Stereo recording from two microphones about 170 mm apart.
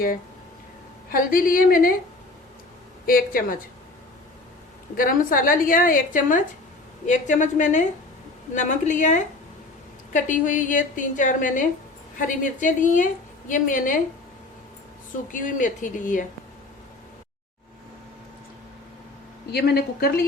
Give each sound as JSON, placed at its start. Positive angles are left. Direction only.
{"t": 1.1, "sound": "a woman's voice", "side_deg": 55}
{"t": 3.1, "sound": "a woman's voice", "side_deg": 55}
{"t": 4.9, "sound": "a woman's voice", "side_deg": 55}
{"t": 15.3, "sound": "a woman's voice", "side_deg": 50}
{"t": 19.5, "sound": "a woman's voice", "side_deg": 70}